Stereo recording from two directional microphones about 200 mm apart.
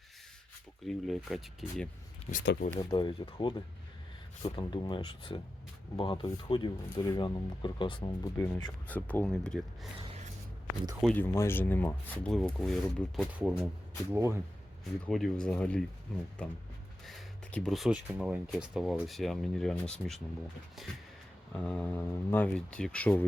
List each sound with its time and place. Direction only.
0.9 s speech: centre (ahead or behind)
2.4 s speech: 60° left (ahead or behind)
2.7 s speech: 25° left (ahead or behind)
4.5 s speech: 25° left (ahead or behind); by 9.9 s centre (ahead or behind)
10.0 s gasp: 30° right (ahead or behind)
11.0 s speech: 10° left (ahead or behind)
14.1 s speech: 15° right (ahead or behind)
15.0 s speech: 5° left (ahead or behind)